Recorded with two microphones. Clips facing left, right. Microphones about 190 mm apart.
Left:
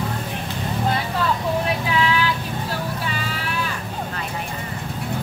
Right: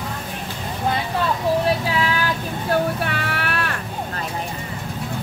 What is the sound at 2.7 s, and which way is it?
Vehicle, 65° right (ahead or behind).